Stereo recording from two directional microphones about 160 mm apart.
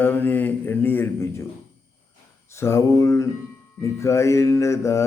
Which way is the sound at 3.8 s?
20° left (ahead or behind).